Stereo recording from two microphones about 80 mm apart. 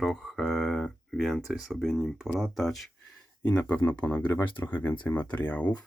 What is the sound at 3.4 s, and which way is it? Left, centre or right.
Speech, centre.